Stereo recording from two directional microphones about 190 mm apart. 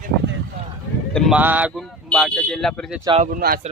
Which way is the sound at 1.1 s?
Centre (ahead or behind).